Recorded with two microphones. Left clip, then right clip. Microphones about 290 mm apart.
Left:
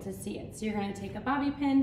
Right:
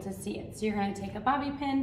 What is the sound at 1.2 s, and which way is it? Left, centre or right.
Speech, centre.